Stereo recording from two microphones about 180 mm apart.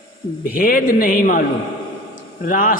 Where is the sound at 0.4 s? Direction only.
50° left (ahead or behind).